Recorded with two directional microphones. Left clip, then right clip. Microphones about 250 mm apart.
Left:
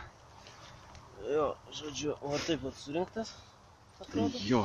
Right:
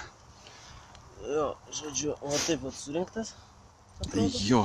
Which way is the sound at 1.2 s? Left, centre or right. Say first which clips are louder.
Right 1 dB; centre.